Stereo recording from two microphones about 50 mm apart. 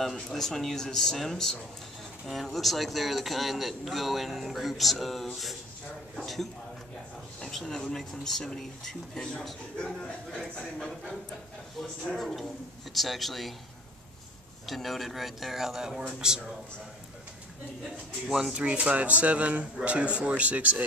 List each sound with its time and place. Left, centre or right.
0.0 s a man's voice: centre
10.4 s a man's voice: centre
12.2 s a man's voice: centre
14.7 s a man's voice: centre
18.2 s speech: centre; by 20.8 s right